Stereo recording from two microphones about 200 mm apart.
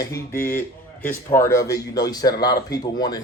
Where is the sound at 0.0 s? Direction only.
15° left (ahead or behind).